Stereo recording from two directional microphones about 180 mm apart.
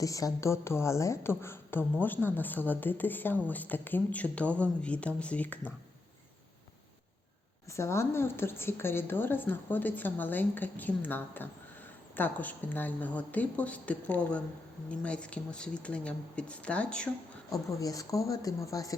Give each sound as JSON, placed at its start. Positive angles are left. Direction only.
{"t": 0.0, "sound": "a woman's voice", "side_deg": 20}
{"t": 7.7, "sound": "a woman's voice", "side_deg": 15}
{"t": 17.5, "sound": "speech", "side_deg": 20}